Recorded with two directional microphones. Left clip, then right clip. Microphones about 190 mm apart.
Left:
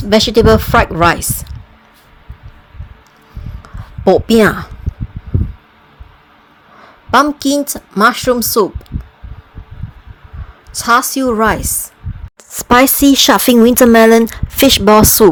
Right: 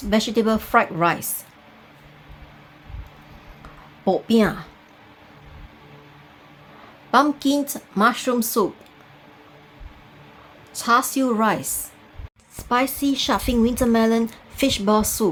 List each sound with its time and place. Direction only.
0.1 s a woman's voice: 45° left (ahead or behind)
4.0 s a woman's voice: 45° left (ahead or behind)
7.1 s speech: 35° left (ahead or behind)
10.8 s speech: 35° left (ahead or behind)
12.5 s speech: 60° left (ahead or behind)